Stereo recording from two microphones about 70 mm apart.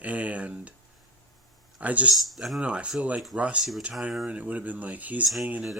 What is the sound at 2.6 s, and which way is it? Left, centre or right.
Speech, centre.